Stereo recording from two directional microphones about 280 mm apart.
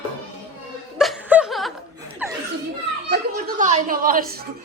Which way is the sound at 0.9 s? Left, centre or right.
Centre.